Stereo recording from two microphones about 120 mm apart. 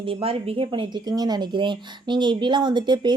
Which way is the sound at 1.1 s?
35° right (ahead or behind).